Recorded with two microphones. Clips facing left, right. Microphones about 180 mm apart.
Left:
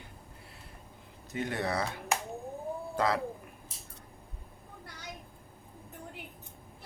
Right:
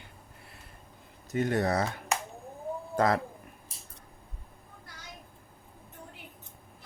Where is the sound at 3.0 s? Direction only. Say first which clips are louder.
Right 4 dB; 45° right (ahead or behind).